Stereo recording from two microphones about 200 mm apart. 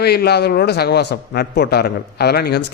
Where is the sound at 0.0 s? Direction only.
55° left (ahead or behind).